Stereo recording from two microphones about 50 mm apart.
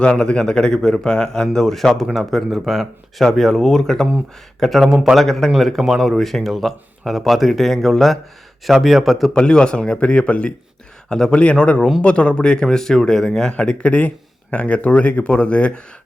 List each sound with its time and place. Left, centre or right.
0.1 s speech: centre
4.9 s a man's voice: centre
5.1 s speech: centre
9.3 s speech: centre
11.1 s speech: centre